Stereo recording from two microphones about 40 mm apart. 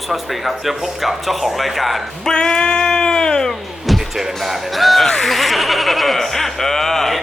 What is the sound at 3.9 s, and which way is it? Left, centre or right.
Speech, centre.